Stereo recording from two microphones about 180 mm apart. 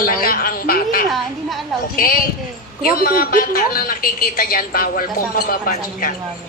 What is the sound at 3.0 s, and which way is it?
A woman's voice, 50° left (ahead or behind).